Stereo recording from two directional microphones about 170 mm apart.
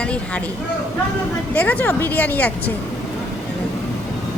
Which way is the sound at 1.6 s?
10° left (ahead or behind).